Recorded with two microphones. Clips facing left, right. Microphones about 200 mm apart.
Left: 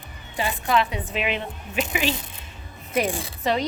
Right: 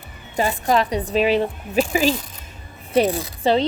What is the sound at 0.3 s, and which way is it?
A woman's voice, 40° right (ahead or behind).